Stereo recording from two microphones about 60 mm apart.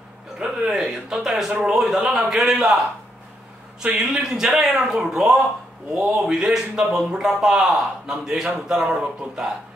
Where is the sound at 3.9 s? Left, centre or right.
Centre.